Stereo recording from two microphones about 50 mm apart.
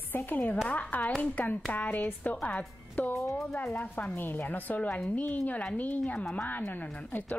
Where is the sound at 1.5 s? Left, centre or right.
Left.